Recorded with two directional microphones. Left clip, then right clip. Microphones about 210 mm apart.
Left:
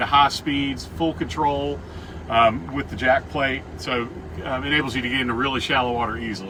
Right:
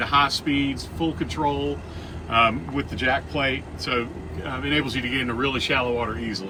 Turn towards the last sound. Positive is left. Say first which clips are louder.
# left 2 dB
turn(degrees=15)  # may be behind; listen again after turning